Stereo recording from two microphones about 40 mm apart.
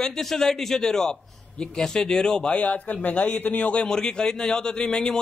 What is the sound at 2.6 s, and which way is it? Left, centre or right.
A man's voice, left.